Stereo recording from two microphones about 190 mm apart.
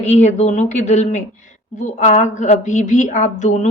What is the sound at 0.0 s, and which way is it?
Speech, 35° left (ahead or behind).